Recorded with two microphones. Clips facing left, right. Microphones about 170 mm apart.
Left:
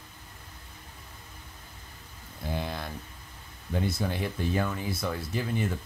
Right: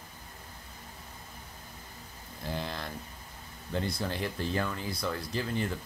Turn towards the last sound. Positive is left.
turn(degrees=15)  # may be behind; listen again after turning